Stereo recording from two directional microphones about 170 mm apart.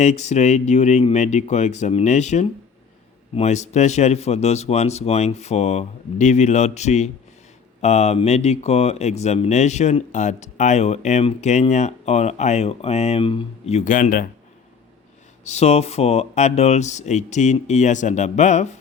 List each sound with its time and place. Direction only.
0.0 s speech: 40° left (ahead or behind)
15.4 s speech: 40° left (ahead or behind)